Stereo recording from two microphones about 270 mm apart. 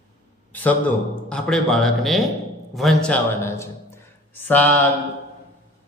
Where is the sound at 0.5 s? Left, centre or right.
Centre.